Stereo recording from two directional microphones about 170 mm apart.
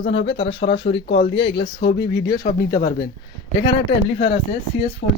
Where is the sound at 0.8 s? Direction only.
90° left.